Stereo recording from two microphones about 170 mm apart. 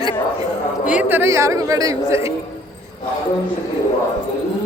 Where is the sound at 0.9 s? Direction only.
10° right (ahead or behind).